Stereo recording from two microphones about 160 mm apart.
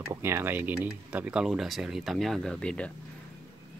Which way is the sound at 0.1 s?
15° right (ahead or behind).